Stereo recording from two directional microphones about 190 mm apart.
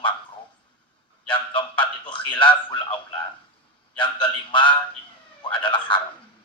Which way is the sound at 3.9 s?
25° left (ahead or behind).